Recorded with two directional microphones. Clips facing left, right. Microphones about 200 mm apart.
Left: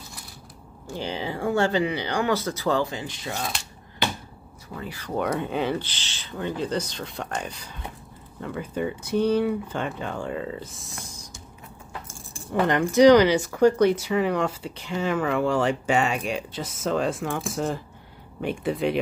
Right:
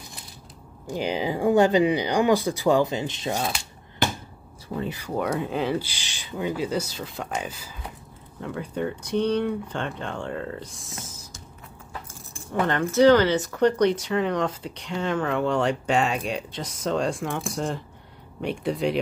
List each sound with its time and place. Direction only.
0.8 s speech: 15° right (ahead or behind)
4.7 s speech: 20° right (ahead or behind)
5.0 s speech: 5° right (ahead or behind)
12.6 s speech: 15° left (ahead or behind)